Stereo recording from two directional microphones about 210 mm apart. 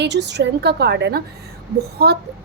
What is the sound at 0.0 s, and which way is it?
A woman's voice, 55° right (ahead or behind).